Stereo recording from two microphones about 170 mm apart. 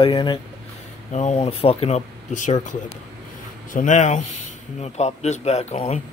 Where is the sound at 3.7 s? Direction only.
45° left (ahead or behind).